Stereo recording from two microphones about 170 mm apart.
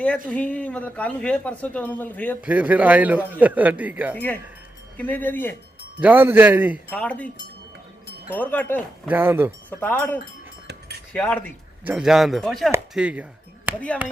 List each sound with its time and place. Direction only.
0.3 s speech: 10° left (ahead or behind)
2.4 s a man's voice: 10° right (ahead or behind)
4.9 s speech: 10° left (ahead or behind)
6.0 s a man's voice: 10° right (ahead or behind)
6.9 s speech: 10° left (ahead or behind)
8.3 s speech: 10° left (ahead or behind)
9.0 s a man's voice: 10° right (ahead or behind)
9.6 s speech: 10° left (ahead or behind)
10.7 s keys jangling: 70° right (ahead or behind)
11.1 s speech: 5° left (ahead or behind)
11.9 s speech: 5° right (ahead or behind)